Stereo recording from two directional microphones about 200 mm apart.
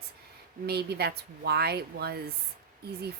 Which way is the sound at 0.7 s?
55° right (ahead or behind).